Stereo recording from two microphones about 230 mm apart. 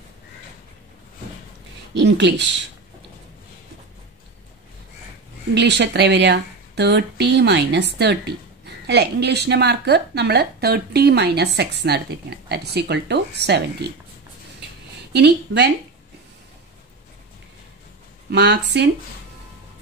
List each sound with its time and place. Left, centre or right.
2.0 s speech: right
5.5 s speech: right
15.1 s speech: right
18.3 s speech: right